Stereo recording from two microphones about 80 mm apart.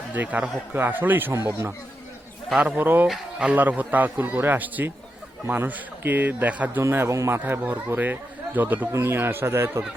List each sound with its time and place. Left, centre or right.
0.1 s speech: right
2.5 s speech: centre
2.7 s speech: right
3.1 s speech: centre
3.5 s speech: right
7.1 s speech: right
8.9 s speech: right